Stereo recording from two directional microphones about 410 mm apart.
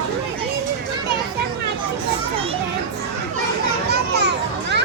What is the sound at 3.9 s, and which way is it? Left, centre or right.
Children playing, right.